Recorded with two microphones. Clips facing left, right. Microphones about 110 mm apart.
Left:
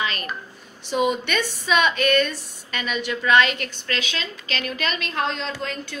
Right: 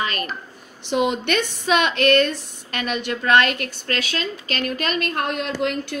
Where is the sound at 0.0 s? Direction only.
45° right (ahead or behind).